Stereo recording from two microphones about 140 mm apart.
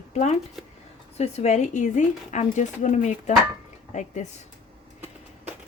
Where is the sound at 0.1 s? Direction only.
55° left (ahead or behind).